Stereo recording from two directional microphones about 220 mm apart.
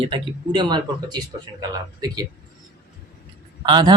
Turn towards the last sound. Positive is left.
turn(degrees=-20)  # may be behind; listen again after turning